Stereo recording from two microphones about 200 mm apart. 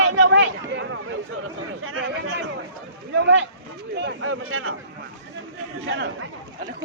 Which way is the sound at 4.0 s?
70° right (ahead or behind).